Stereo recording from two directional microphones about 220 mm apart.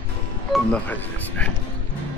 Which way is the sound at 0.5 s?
5° left (ahead or behind).